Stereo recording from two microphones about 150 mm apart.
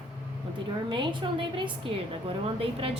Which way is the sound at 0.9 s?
30° right (ahead or behind).